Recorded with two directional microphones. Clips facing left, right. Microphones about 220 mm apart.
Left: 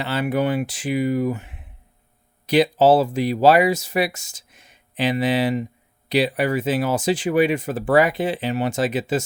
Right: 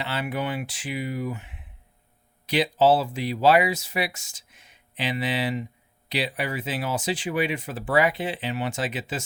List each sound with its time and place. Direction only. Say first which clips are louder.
0.0 s speech: left 7 dB; 40° left (ahead or behind)